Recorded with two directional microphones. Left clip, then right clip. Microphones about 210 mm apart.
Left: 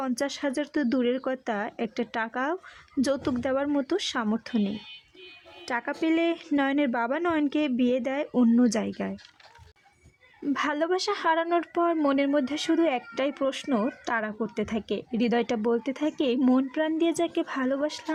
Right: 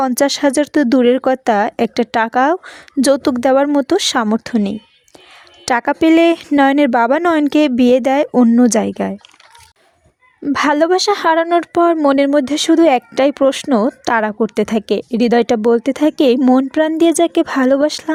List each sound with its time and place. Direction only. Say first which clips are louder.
0.0 s speech: right 15 dB; 45° right (ahead or behind)
10.4 s speech: right 14 dB; 45° right (ahead or behind)